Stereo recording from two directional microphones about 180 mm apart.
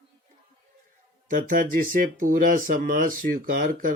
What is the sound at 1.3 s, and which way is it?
Speech, 50° right (ahead or behind).